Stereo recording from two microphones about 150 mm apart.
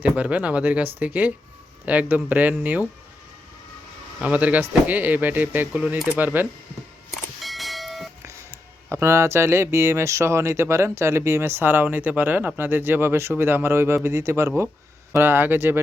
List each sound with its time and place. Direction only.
0.0 s speech: 10° right (ahead or behind)
4.2 s speech: 10° right (ahead or behind)
7.1 s a sound: centre (ahead or behind)
8.2 s speech: 20° right (ahead or behind)